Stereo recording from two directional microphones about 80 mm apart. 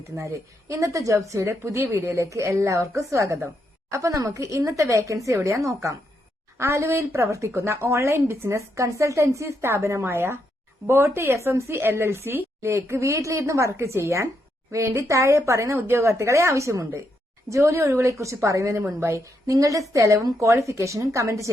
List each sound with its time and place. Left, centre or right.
0.2 s a woman's voice: right